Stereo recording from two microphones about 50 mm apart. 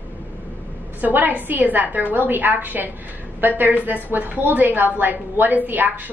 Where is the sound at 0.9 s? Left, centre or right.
Right.